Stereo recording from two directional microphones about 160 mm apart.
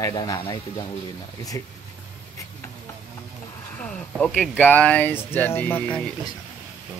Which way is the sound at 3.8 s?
5° left (ahead or behind).